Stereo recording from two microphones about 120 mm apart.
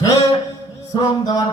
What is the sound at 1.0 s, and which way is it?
Mantra, 30° left (ahead or behind).